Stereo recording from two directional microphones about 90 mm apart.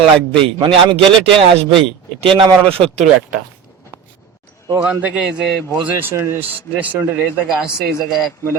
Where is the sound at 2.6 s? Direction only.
90° right.